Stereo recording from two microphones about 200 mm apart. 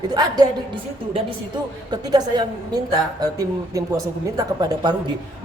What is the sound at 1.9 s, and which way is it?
A woman's voice, 20° right (ahead or behind).